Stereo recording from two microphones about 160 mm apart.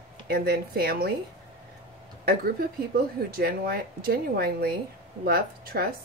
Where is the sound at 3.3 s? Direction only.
70° right (ahead or behind).